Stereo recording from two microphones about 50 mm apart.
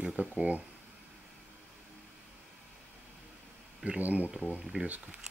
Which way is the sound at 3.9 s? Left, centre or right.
Right.